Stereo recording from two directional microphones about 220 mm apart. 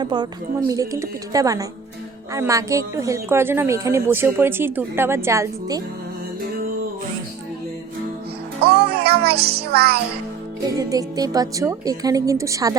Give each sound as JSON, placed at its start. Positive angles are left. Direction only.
{"t": 0.0, "sound": "a woman's voice", "side_deg": -20}
{"t": 8.7, "sound": "music", "side_deg": -25}
{"t": 9.0, "sound": "music", "side_deg": -45}
{"t": 10.6, "sound": "speech", "side_deg": -15}